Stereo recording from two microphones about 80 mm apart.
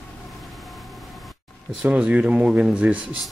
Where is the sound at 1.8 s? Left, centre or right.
Centre.